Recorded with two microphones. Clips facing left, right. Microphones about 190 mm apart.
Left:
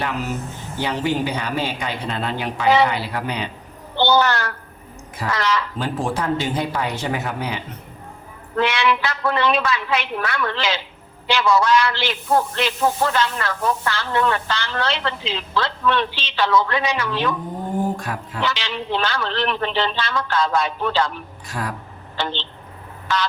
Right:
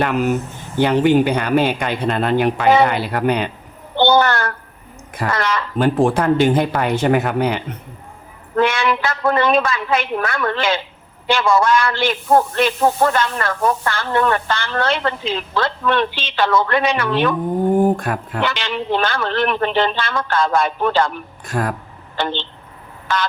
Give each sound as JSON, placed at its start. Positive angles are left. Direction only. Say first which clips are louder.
{"t": 0.0, "sound": "a man's voice", "louder": "right 8 dB", "side_deg": -60}
{"t": 8.5, "sound": "a man's voice", "louder": "right 3 dB", "side_deg": -50}